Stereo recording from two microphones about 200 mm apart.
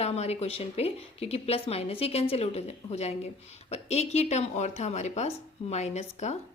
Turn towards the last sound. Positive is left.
turn(degrees=35)  # may be behind; listen again after turning